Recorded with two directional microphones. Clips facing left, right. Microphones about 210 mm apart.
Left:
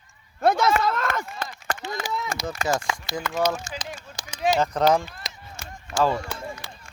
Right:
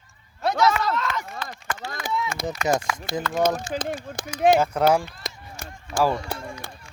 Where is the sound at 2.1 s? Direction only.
45° left (ahead or behind).